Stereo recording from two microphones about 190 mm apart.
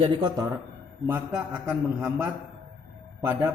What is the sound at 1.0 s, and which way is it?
A man's voice, 10° right (ahead or behind).